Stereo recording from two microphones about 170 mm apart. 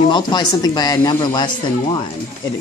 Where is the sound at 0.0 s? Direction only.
25° left (ahead or behind).